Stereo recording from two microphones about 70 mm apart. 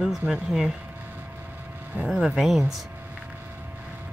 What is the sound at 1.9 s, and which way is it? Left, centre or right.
Speech, right.